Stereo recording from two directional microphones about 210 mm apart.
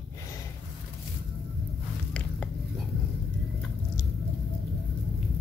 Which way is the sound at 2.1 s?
5° left (ahead or behind).